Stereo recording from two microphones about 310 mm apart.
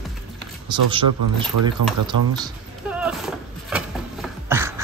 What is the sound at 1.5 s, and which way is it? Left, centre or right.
Speech, right.